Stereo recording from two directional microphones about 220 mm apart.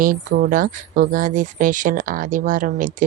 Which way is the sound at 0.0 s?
40° right (ahead or behind).